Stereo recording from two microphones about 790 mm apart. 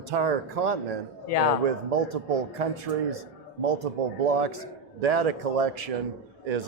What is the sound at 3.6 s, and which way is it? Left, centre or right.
A man's voice, right.